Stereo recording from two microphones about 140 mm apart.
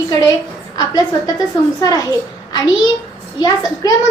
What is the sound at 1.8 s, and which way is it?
Speech, 25° left (ahead or behind).